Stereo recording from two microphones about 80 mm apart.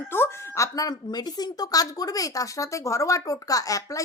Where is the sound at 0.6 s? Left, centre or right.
Left.